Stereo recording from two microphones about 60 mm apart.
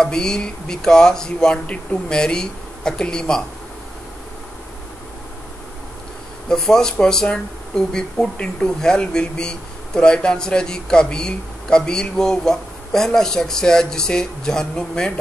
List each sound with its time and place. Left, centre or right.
0.0 s speech: centre
6.5 s speech: centre